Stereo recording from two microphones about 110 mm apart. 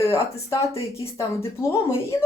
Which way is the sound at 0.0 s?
30° left (ahead or behind).